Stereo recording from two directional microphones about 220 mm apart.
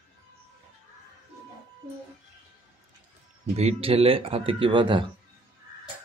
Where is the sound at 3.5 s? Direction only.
25° right (ahead or behind).